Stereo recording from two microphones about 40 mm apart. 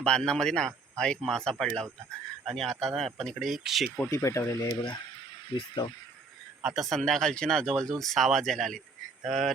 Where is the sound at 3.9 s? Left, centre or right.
Left.